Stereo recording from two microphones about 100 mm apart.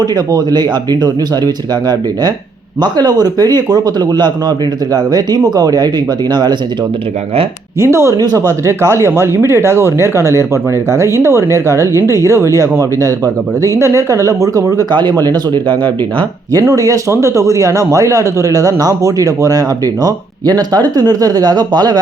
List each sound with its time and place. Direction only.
0.0 s speech: 40° right (ahead or behind)
7.8 s speech: 25° right (ahead or behind)
8.1 s speech: 40° right (ahead or behind)